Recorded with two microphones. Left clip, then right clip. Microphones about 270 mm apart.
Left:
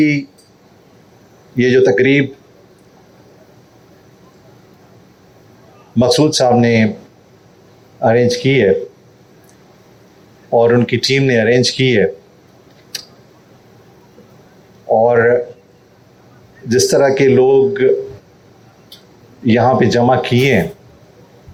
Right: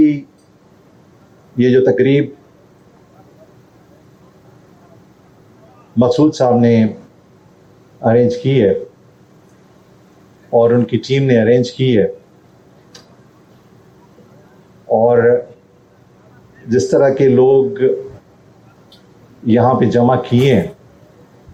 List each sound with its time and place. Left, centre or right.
0.0 s a sound: left
1.5 s speech: left
6.0 s speech: left
8.0 s speech: left
10.5 s speech: left
12.9 s tick: left
14.8 s speech: left
16.6 s speech: left
19.5 s speech: left